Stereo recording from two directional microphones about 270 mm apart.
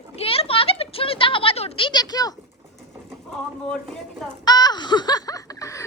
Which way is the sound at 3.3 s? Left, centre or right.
Centre.